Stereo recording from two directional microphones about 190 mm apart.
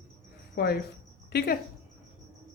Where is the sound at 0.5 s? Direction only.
55° left (ahead or behind).